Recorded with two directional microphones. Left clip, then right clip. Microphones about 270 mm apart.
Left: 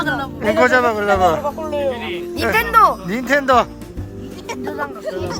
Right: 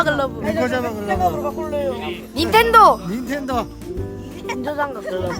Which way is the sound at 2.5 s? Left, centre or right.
Right.